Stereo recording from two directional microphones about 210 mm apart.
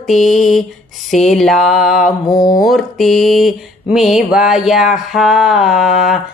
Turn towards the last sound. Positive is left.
turn(degrees=0)  # may be behind; listen again after turning